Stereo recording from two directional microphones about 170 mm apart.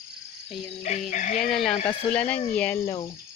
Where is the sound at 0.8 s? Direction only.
45° left (ahead or behind).